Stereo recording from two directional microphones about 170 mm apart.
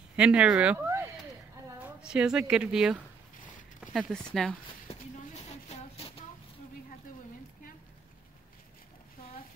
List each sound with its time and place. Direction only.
0.1 s speech: 5° right (ahead or behind)
1.8 s a woman's voice: 5° right (ahead or behind)
4.8 s a sound: 40° left (ahead or behind)